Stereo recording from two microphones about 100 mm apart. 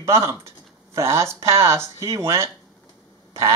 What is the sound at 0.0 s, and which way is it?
Speech, 30° right (ahead or behind).